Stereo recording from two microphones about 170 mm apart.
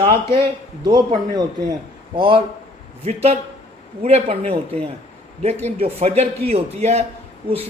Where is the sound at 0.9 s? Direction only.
25° right (ahead or behind).